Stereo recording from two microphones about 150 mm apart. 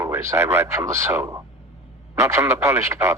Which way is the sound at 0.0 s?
20° right (ahead or behind).